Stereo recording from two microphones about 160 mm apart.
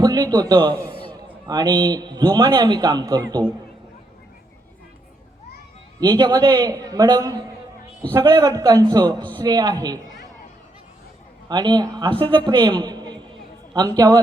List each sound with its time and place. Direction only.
0.0 s a man's voice: 25° right (ahead or behind)
6.0 s a man's voice: 25° right (ahead or behind)
11.4 s a man's voice: 25° right (ahead or behind)
13.3 s a sound: 25° right (ahead or behind)